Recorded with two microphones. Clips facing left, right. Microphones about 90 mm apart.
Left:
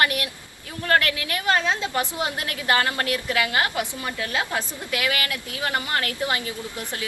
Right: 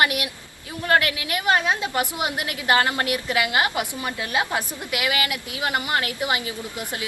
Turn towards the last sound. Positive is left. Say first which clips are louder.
# right 1 dB
turn(degrees=-15)  # may be behind; listen again after turning